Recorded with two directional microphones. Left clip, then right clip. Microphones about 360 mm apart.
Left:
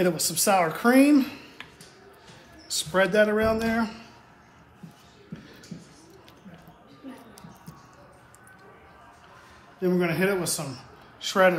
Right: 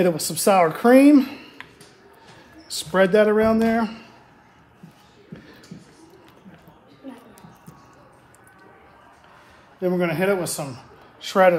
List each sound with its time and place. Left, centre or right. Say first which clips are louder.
0.0 s speech: right 5 dB; right
2.7 s speech: right 5 dB; right
9.8 s speech: right 3 dB; right